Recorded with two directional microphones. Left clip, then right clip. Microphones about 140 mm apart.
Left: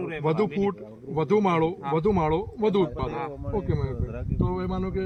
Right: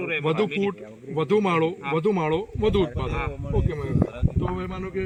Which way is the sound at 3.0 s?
15° right (ahead or behind).